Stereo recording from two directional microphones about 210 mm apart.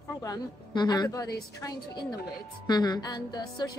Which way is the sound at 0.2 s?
20° left (ahead or behind).